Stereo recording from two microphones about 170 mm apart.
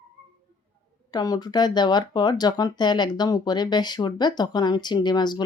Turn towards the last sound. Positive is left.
turn(degrees=25)  # may be behind; listen again after turning